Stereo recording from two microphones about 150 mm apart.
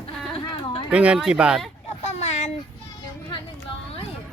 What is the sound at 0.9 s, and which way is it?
Speech, 10° right (ahead or behind).